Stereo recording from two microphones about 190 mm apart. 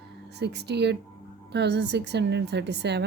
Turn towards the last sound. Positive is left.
turn(degrees=-65)  # may be behind; listen again after turning